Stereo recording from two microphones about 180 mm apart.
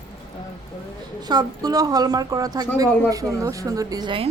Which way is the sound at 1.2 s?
20° right (ahead or behind).